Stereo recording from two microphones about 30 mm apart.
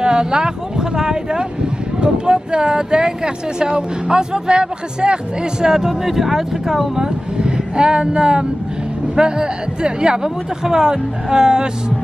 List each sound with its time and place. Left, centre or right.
0.0 s speech: right
5.7 s speech: centre
7.3 s a woman's voice: right